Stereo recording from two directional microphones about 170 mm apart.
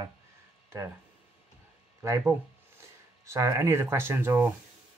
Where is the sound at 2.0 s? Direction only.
15° right (ahead or behind).